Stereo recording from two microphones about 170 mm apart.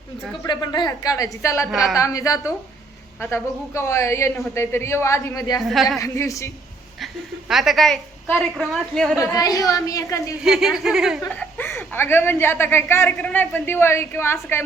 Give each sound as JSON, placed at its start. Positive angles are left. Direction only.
{"t": 0.4, "sound": "a woman's voice", "side_deg": 25}
{"t": 1.7, "sound": "a woman's voice", "side_deg": 0}
{"t": 2.0, "sound": "a woman's voice", "side_deg": 20}
{"t": 5.6, "sound": "a woman's voice", "side_deg": 0}
{"t": 6.0, "sound": "a woman's voice", "side_deg": 20}
{"t": 7.0, "sound": "a woman's voice", "side_deg": 0}
{"t": 9.1, "sound": "a woman's voice", "side_deg": 20}
{"t": 10.4, "sound": "a woman's voice", "side_deg": 0}
{"t": 11.3, "sound": "a woman's voice", "side_deg": 10}